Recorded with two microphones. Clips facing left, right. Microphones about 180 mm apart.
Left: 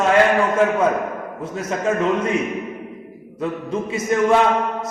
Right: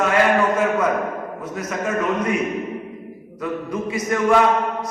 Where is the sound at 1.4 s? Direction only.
25° left (ahead or behind).